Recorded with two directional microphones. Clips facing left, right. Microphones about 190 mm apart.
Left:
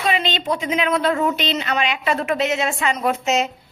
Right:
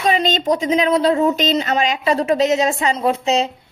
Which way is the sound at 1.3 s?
40° right (ahead or behind).